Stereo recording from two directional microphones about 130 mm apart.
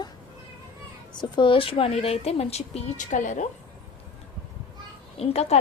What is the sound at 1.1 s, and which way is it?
Speech, 35° left (ahead or behind).